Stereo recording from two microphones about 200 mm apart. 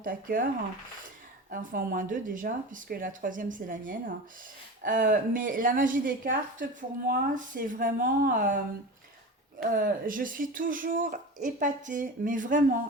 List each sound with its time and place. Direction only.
0.0 s speech: 45° right (ahead or behind)
1.5 s a woman's voice: 45° right (ahead or behind)